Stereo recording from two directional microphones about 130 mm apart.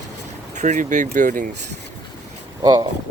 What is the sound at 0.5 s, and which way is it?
Speech, 70° right (ahead or behind).